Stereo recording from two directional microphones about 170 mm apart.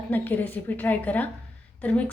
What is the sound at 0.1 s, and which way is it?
A woman's voice, 10° left (ahead or behind).